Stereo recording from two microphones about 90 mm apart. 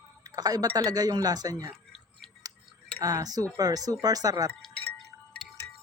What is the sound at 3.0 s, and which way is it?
Speech, 45° right (ahead or behind).